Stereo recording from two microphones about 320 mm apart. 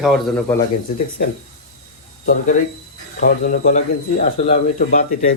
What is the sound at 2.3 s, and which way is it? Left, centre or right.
Speech, left.